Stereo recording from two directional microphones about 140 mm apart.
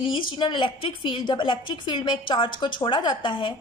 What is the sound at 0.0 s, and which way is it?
A woman's voice, 35° left (ahead or behind).